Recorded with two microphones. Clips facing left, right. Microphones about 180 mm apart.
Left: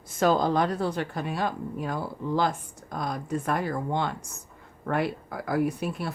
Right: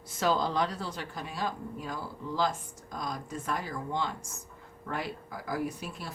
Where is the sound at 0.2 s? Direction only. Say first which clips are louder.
Left 6 dB; 50° left (ahead or behind).